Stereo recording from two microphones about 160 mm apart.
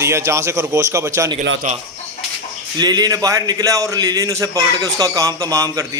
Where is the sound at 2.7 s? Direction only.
25° right (ahead or behind).